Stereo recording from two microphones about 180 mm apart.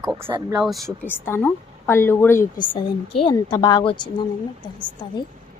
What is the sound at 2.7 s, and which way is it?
A woman's voice, 30° left (ahead or behind).